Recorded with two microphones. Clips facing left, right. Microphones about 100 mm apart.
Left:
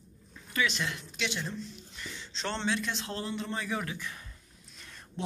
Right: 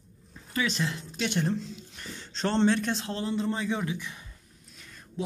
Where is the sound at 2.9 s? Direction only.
30° right (ahead or behind).